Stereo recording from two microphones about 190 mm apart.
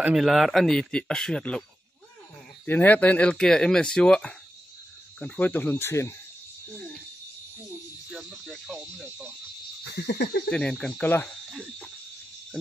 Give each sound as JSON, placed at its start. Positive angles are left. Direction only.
{"t": 0.0, "sound": "speech", "side_deg": 0}
{"t": 2.6, "sound": "speech", "side_deg": 10}
{"t": 8.1, "sound": "speech", "side_deg": 0}
{"t": 9.8, "sound": "a sound", "side_deg": 60}
{"t": 10.5, "sound": "speech", "side_deg": 5}